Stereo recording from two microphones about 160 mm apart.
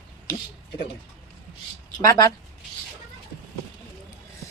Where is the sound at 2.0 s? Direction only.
25° left (ahead or behind).